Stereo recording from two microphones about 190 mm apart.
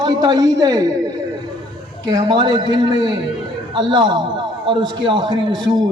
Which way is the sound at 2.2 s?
25° right (ahead or behind).